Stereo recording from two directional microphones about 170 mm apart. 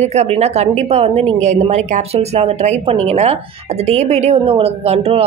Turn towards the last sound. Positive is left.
turn(degrees=-35)  # may be behind; listen again after turning